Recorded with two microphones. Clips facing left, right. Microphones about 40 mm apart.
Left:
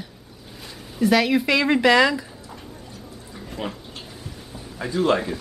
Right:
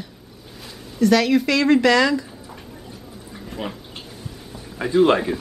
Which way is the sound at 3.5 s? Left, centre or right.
Centre.